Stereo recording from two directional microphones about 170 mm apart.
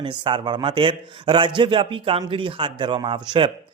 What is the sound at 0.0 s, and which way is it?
Speech, 30° right (ahead or behind).